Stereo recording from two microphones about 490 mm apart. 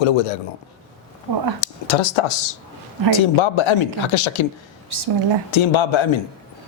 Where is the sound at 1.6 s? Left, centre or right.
Left.